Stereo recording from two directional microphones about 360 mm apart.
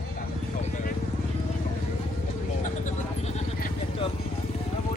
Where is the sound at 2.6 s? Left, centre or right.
Centre.